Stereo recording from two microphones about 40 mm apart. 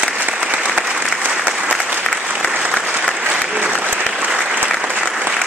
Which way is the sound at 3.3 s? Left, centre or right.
Right.